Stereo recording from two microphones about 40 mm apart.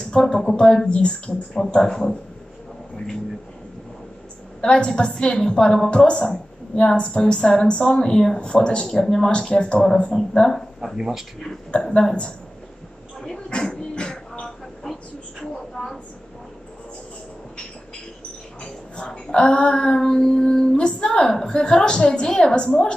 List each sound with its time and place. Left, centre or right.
0.0 s a sound: left
0.4 s speech: centre
1.8 s speech: centre
4.6 s speech: left
9.3 s speech: left
10.1 s speech: centre
11.7 s speech: left
13.5 s dog: left
15.4 s a sound: centre
18.6 s a sound: left
21.3 s speech: centre
21.5 s speech: left